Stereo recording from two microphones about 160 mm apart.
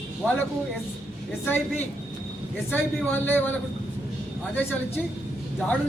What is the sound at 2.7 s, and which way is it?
Speech, 10° left (ahead or behind).